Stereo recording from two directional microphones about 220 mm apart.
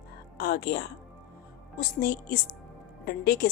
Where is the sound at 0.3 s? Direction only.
45° left (ahead or behind).